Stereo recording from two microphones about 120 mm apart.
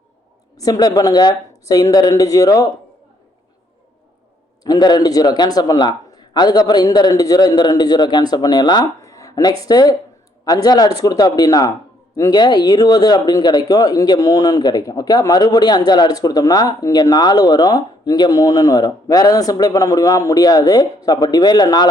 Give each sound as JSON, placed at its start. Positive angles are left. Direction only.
{"t": 0.5, "sound": "speech", "side_deg": 30}
{"t": 4.6, "sound": "speech", "side_deg": 35}